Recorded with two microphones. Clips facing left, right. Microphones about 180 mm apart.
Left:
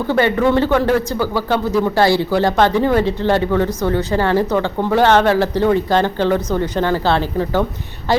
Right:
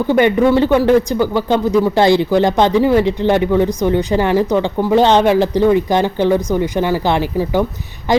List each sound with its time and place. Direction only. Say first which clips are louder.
0.1 s speech: right 3 dB; 15° right (ahead or behind)